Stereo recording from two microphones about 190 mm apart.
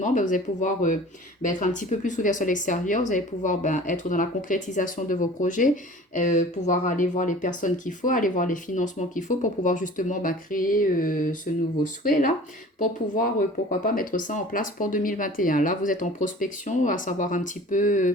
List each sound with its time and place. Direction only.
0.0 s speech: 40° left (ahead or behind)